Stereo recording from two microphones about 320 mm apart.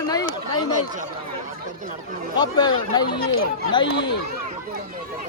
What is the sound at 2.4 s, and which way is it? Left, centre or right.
Speech, centre.